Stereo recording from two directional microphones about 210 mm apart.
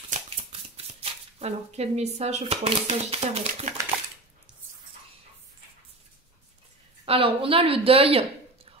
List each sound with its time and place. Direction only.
0.1 s speech: 30° right (ahead or behind)
7.1 s speech: 25° right (ahead or behind)